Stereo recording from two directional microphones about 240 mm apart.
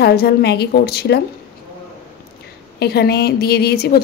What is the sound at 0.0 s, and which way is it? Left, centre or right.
A woman's voice, left.